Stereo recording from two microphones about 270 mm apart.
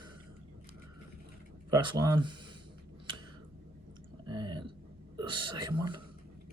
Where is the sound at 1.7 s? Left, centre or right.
Centre.